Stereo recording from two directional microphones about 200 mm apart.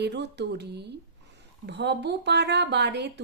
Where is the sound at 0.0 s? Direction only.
55° right (ahead or behind).